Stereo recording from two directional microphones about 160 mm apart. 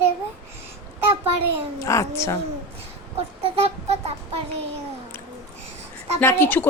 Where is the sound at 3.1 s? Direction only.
40° right (ahead or behind).